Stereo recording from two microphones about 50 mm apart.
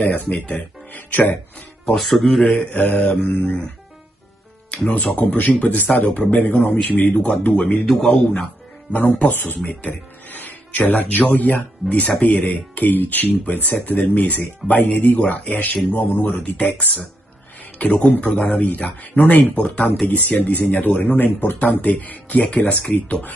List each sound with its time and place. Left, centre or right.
0.0 s speech: left
2.0 s a man's voice: centre
2.4 s speech: left
4.8 s speech: left
7.2 s speech: left
8.9 s speech: left